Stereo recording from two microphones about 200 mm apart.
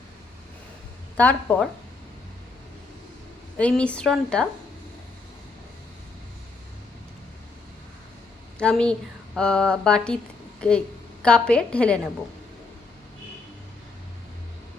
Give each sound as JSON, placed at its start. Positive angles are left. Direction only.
{"t": 1.1, "sound": "speech", "side_deg": 5}
{"t": 3.6, "sound": "speech", "side_deg": 5}
{"t": 8.5, "sound": "a woman's voice", "side_deg": 5}